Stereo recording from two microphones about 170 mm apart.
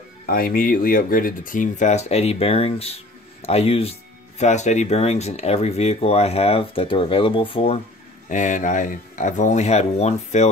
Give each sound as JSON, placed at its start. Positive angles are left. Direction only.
{"t": 0.3, "sound": "speech", "side_deg": 60}
{"t": 8.3, "sound": "speech", "side_deg": 50}